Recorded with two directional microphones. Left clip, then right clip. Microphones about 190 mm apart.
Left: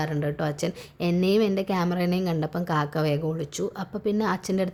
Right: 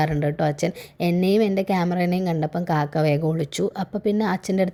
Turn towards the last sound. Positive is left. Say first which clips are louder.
# right 3 dB
turn(degrees=-20)  # may be behind; listen again after turning